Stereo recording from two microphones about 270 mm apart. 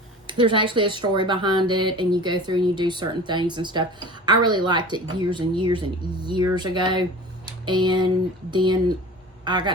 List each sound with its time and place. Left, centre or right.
0.3 s speech: centre